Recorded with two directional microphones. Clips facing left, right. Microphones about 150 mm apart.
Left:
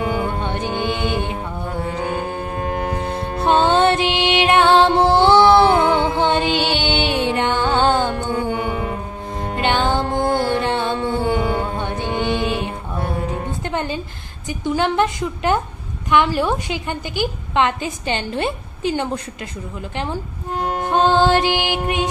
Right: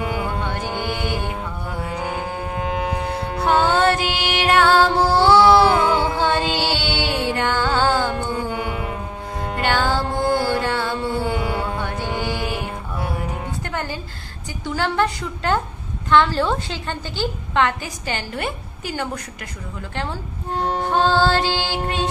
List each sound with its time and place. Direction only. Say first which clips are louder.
0.4 s music: left 3 dB; 20° left (ahead or behind)
2.7 s music: left 1 dB; 45° left (ahead or behind)
3.1 s music: left 3 dB; 20° left (ahead or behind)
9.6 s music: left 2 dB; 20° left (ahead or behind)
11.7 s mantra: left 2 dB; 20° left (ahead or behind)
13.7 s a sound: left 5 dB; 20° left (ahead or behind)
14.6 s a woman's voice: left 3 dB; 20° left (ahead or behind)
20.8 s a woman's voice: left 3 dB; 20° left (ahead or behind)